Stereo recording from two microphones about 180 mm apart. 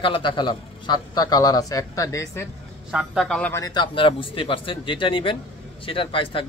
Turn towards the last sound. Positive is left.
turn(degrees=30)  # may be behind; listen again after turning